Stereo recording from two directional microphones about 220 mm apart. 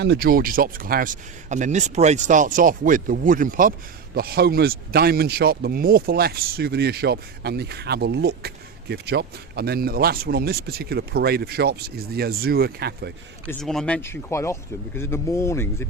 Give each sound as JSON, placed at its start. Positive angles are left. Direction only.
{"t": 0.0, "sound": "speech", "side_deg": -45}
{"t": 13.5, "sound": "speech", "side_deg": 0}